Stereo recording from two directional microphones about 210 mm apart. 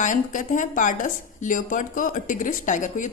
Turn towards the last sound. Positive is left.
turn(degrees=35)  # may be behind; listen again after turning